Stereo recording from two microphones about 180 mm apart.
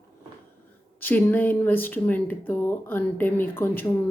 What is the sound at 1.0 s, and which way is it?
Speech, 10° left (ahead or behind).